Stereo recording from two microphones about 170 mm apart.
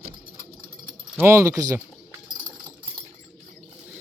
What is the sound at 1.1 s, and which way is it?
Speech, 15° right (ahead or behind).